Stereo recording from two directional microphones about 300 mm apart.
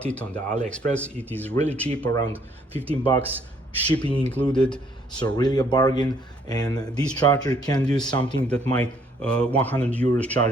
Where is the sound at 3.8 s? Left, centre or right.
Centre.